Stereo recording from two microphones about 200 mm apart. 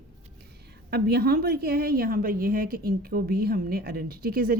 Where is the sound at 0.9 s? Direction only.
55° right (ahead or behind).